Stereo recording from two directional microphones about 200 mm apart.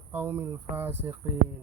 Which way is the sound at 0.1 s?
10° right (ahead or behind).